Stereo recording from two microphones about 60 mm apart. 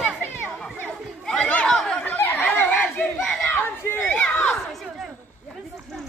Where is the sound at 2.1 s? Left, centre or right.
Left.